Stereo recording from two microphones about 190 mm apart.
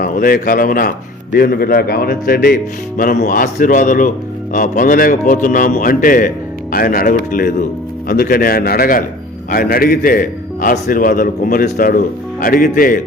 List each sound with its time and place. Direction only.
0.0 s a man's voice: 45° left (ahead or behind)